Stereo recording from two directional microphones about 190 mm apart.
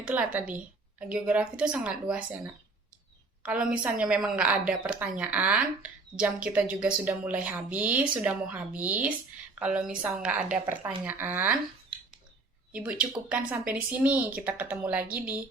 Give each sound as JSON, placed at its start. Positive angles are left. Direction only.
{"t": 0.0, "sound": "speech", "side_deg": -5}
{"t": 3.4, "sound": "a woman's voice", "side_deg": -5}
{"t": 12.7, "sound": "a woman's voice", "side_deg": -5}
{"t": 15.0, "sound": "a woman's voice", "side_deg": -50}